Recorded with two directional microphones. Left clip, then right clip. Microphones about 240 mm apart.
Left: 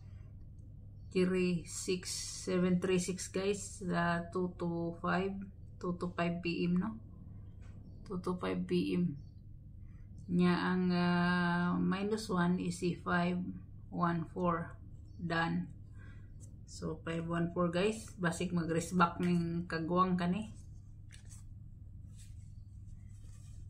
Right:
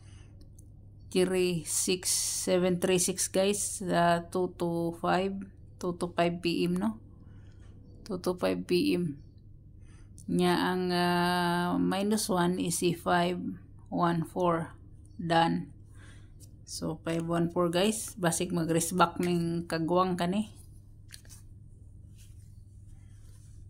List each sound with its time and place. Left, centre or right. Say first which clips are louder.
1.1 s speech: right 6 dB; right
8.0 s speech: right 8 dB; right
10.3 s speech: right 6 dB; right
15.2 s a sound: right 9 dB; right
16.6 s speech: right 7 dB; right